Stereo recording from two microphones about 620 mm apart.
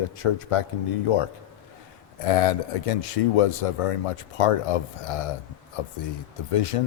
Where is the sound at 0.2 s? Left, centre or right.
Left.